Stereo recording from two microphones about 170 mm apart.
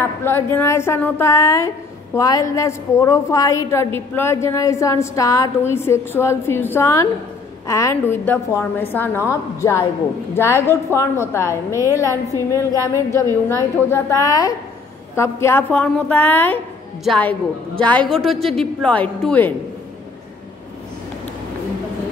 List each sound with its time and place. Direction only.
0.0 s a woman's voice: 15° left (ahead or behind)